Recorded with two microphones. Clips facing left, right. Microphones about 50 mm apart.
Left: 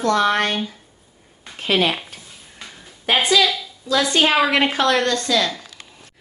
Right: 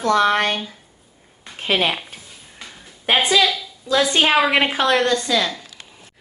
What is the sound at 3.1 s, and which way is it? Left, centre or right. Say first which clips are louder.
Speech: even; centre.